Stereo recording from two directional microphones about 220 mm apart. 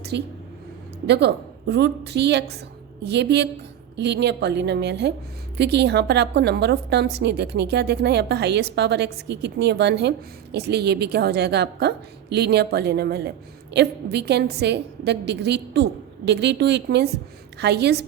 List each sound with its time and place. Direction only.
0.1 s a woman's voice: 50° right (ahead or behind)